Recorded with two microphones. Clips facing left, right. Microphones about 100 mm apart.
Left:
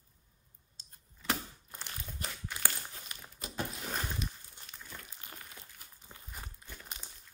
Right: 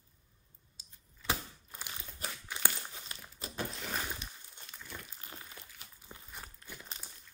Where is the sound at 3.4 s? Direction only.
35° right (ahead or behind).